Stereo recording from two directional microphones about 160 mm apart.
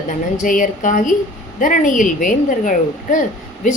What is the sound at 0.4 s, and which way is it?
A woman's voice, 55° left (ahead or behind).